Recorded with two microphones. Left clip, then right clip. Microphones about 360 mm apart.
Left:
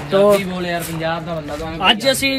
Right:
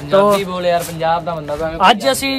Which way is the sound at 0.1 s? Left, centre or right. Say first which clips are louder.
Right 1 dB; centre.